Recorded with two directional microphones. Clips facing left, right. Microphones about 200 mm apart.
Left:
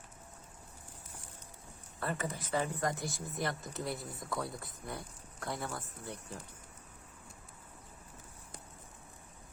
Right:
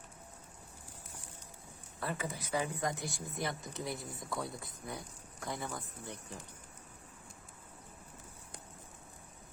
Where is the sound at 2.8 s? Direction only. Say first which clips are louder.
Left 2 dB; centre (ahead or behind).